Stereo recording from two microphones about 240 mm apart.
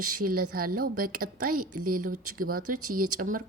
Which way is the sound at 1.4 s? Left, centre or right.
Right.